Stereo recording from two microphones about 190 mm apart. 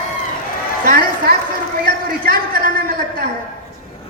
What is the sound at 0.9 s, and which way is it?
Speech, 50° right (ahead or behind).